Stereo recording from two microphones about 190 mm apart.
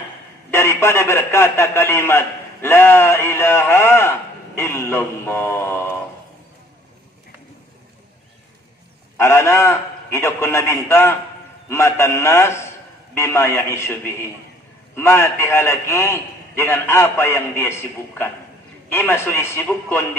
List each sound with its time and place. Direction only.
0.5 s a man's voice: 15° left (ahead or behind)
9.1 s a man's voice: 15° left (ahead or behind)